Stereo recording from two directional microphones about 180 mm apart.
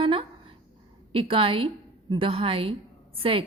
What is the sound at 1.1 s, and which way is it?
A woman's voice, 30° right (ahead or behind).